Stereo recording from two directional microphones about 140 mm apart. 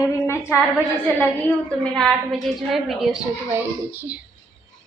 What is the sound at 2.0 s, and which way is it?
A woman's voice, centre (ahead or behind).